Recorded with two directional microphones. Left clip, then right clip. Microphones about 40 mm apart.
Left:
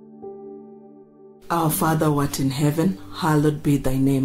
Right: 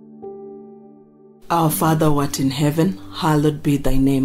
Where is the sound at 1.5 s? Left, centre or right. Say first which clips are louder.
Right 3 dB; right.